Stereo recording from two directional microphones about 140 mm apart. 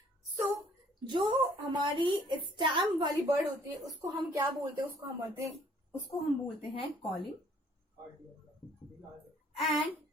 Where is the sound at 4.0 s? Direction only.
20° right (ahead or behind).